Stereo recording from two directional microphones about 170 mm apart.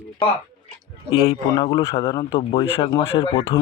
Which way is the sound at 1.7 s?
20° left (ahead or behind).